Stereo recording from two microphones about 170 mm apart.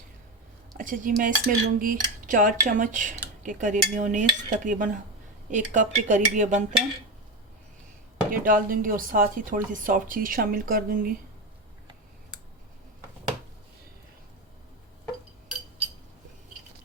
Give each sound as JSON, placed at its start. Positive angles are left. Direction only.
{"t": 0.8, "sound": "cutlery", "side_deg": -50}
{"t": 8.3, "sound": "speech", "side_deg": -55}